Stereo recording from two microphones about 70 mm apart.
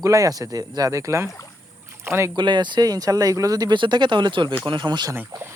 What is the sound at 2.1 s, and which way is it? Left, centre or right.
Speech, right.